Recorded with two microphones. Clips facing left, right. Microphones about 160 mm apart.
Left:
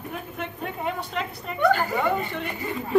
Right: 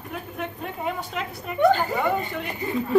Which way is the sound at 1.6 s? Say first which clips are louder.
Right 3 dB; 20° right (ahead or behind).